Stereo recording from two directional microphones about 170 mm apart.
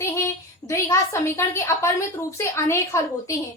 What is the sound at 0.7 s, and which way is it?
A woman's voice, 15° left (ahead or behind).